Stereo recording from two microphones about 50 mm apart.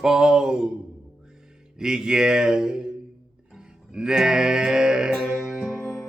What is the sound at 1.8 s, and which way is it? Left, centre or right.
Music, centre.